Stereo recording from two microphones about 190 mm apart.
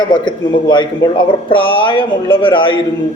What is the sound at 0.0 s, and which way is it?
A man's voice, 25° left (ahead or behind).